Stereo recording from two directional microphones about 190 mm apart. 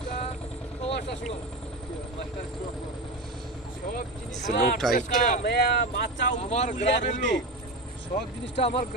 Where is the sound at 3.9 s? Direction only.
40° left (ahead or behind).